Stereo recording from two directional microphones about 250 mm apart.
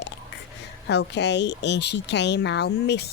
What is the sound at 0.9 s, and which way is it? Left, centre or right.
Speech, left.